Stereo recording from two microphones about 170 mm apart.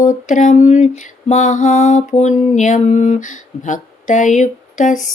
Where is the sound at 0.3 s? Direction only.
45° left (ahead or behind).